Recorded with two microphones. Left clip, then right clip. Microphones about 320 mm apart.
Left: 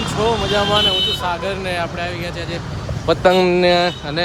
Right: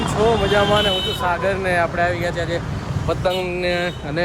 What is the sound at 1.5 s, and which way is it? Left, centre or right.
Speech, centre.